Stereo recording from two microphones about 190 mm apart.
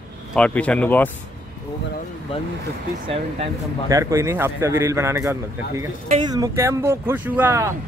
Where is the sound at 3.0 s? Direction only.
30° right (ahead or behind).